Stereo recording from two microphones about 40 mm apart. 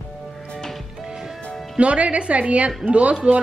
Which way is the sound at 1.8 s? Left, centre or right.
Right.